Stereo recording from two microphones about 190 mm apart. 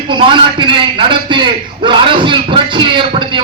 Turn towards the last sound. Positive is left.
turn(degrees=-25)  # may be behind; listen again after turning